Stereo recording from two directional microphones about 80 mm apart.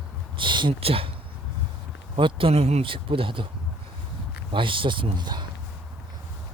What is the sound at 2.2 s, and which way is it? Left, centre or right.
Speech, right.